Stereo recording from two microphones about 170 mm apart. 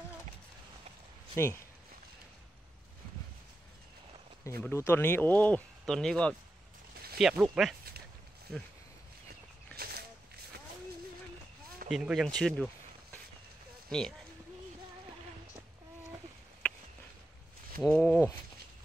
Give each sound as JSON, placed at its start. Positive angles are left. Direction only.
{"t": 1.3, "sound": "speech", "side_deg": 15}
{"t": 4.5, "sound": "speech", "side_deg": 15}
{"t": 9.8, "sound": "a sound", "side_deg": -65}
{"t": 11.9, "sound": "speech", "side_deg": -5}
{"t": 13.8, "sound": "speech", "side_deg": 5}
{"t": 17.7, "sound": "speech", "side_deg": 10}